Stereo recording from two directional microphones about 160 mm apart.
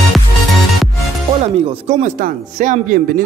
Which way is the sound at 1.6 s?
40° right (ahead or behind).